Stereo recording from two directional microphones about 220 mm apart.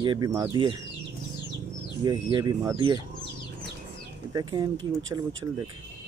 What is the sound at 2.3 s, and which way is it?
Speech, 20° right (ahead or behind).